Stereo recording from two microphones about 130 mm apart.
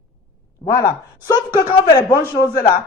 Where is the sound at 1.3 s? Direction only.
30° left (ahead or behind).